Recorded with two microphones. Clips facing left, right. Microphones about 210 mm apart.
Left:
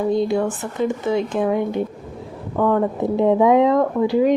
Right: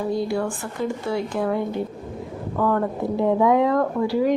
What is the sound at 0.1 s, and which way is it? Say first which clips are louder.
Speech: left 4 dB; 20° left (ahead or behind).